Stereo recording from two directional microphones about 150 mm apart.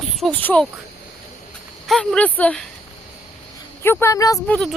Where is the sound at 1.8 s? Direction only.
5° left (ahead or behind).